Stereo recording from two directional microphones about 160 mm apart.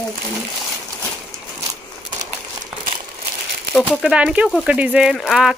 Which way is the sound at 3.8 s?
5° right (ahead or behind).